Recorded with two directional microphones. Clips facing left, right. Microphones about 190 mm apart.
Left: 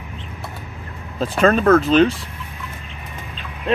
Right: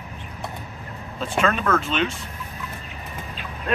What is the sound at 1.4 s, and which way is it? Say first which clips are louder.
Speech: left 9 dB; 40° left (ahead or behind).